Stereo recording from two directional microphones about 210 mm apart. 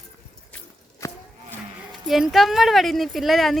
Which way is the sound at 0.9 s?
15° left (ahead or behind).